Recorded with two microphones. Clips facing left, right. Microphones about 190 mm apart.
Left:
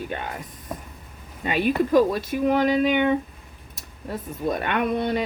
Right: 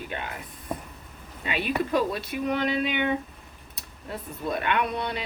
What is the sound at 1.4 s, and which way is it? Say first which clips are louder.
Speech: left 6 dB; 45° left (ahead or behind).